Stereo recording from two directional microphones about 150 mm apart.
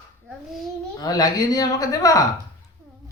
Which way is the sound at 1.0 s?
25° left (ahead or behind).